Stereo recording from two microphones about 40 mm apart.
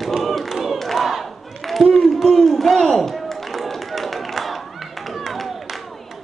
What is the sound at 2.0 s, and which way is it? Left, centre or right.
Speech, centre.